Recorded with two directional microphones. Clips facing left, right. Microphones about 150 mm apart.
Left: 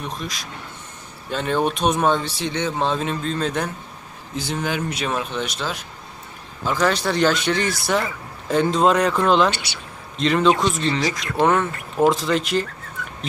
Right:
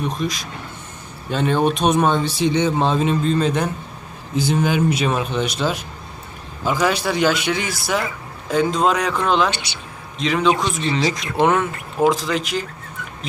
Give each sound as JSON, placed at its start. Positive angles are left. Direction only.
{"t": 0.0, "sound": "speech", "side_deg": 0}
{"t": 11.0, "sound": "speech", "side_deg": -20}
{"t": 11.5, "sound": "speech", "side_deg": -5}